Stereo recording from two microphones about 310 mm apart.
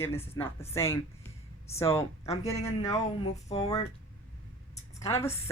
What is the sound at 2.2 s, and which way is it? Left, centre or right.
Speech, centre.